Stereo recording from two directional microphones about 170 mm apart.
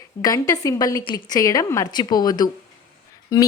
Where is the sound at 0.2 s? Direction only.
20° left (ahead or behind).